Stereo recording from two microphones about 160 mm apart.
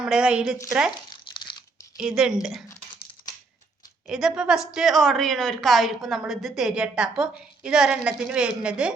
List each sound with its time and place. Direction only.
0.0 s speech: 5° right (ahead or behind)
1.1 s crunch: 30° left (ahead or behind)
2.0 s a woman's voice: 5° right (ahead or behind)
4.0 s a woman's voice: 5° right (ahead or behind)